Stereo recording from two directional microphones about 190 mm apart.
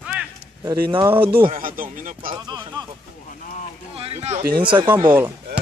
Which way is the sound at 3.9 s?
35° right (ahead or behind).